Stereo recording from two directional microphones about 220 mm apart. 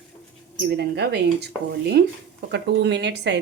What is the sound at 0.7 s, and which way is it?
A woman's voice, 50° right (ahead or behind).